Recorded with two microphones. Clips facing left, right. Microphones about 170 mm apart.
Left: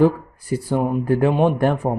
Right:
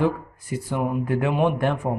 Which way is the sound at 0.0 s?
35° left (ahead or behind).